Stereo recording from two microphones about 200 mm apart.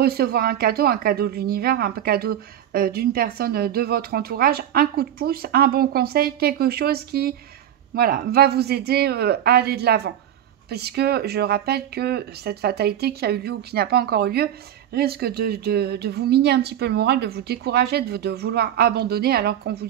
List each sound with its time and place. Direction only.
0.0 s speech: 50° right (ahead or behind)